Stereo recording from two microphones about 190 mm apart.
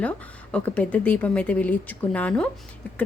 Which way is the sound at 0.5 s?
5° left (ahead or behind).